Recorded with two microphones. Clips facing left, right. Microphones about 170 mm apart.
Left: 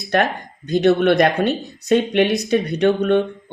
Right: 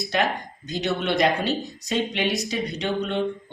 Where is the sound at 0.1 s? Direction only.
55° left (ahead or behind).